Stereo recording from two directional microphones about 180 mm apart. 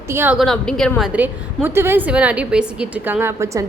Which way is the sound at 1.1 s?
10° right (ahead or behind).